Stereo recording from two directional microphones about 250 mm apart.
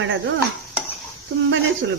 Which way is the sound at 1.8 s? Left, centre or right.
Right.